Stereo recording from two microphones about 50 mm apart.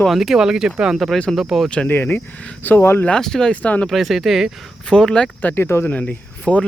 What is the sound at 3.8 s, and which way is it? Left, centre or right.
Speech, centre.